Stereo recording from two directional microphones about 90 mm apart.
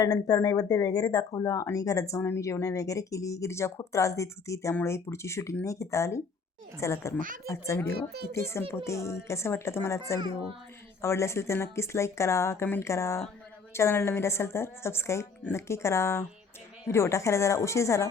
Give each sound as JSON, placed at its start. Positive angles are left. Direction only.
{"t": 0.0, "sound": "a woman's voice", "side_deg": 45}